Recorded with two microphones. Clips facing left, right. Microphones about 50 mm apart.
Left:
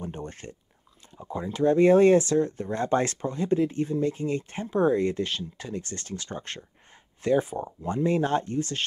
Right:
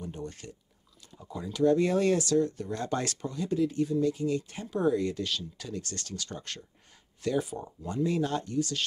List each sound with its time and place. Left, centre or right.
0.0 s speech: left